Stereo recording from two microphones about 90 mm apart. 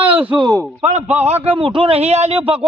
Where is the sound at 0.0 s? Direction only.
20° right (ahead or behind).